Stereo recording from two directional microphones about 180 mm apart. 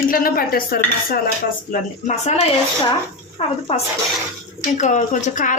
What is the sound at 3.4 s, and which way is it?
Speech, 35° left (ahead or behind).